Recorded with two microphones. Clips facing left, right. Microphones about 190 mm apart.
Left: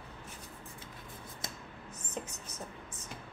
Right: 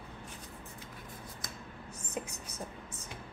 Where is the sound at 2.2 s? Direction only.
10° right (ahead or behind).